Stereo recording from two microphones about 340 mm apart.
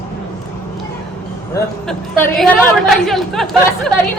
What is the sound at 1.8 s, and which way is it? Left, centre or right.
A woman's voice, centre.